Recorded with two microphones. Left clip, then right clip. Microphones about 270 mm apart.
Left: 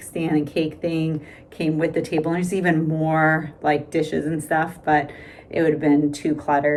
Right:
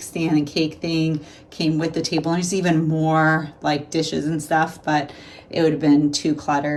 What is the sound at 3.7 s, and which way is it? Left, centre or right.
Speech, centre.